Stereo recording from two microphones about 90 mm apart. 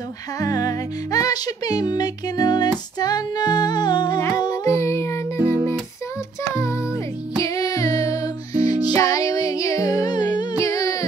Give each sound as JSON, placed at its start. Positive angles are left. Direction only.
{"t": 0.4, "sound": "music", "side_deg": 45}
{"t": 5.4, "sound": "music", "side_deg": -20}
{"t": 6.5, "sound": "music", "side_deg": 35}